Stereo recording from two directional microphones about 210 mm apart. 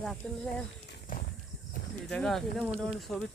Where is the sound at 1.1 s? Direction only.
40° left (ahead or behind).